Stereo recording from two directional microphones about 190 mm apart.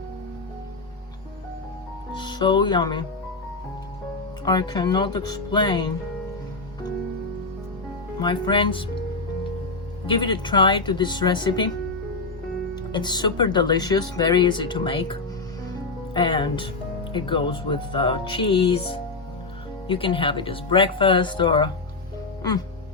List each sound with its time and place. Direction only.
2.1 s music: 25° left (ahead or behind)
4.4 s speech: 20° left (ahead or behind)
8.2 s speech: 25° left (ahead or behind)
10.1 s speech: 25° left (ahead or behind)
12.7 s speech: 25° left (ahead or behind)